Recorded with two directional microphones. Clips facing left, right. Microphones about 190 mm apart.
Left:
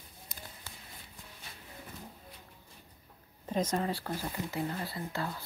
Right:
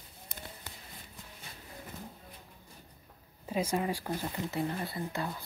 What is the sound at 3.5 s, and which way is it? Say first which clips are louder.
Speech: even; 10° right (ahead or behind).